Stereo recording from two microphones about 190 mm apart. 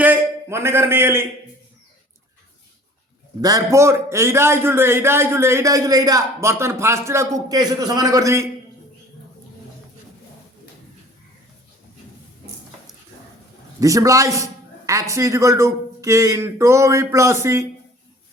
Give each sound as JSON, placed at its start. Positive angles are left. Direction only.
{"t": 0.0, "sound": "a man's voice", "side_deg": -10}
{"t": 3.4, "sound": "a man's voice", "side_deg": -15}
{"t": 13.7, "sound": "a man's voice", "side_deg": -15}